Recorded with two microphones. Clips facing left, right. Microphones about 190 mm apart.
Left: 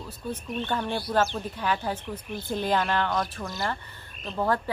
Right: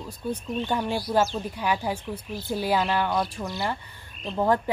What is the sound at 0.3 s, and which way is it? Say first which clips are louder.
A woman's voice: right 3 dB; 15° right (ahead or behind).